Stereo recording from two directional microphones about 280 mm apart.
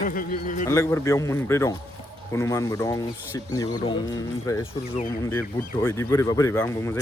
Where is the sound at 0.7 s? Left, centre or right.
Centre.